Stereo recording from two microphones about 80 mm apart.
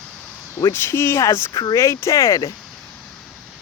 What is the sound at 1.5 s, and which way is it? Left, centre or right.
Speech, left.